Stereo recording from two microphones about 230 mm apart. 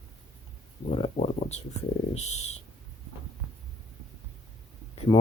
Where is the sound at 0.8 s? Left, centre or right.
Left.